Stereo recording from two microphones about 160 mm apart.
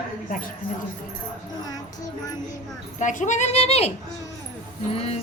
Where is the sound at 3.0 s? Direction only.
50° left (ahead or behind).